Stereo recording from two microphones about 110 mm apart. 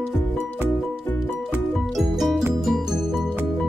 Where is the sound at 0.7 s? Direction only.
5° left (ahead or behind).